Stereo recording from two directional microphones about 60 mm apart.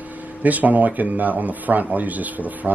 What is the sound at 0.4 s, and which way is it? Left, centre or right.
Speech, right.